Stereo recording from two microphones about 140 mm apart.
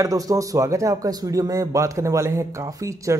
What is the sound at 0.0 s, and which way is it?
Speech, 25° right (ahead or behind).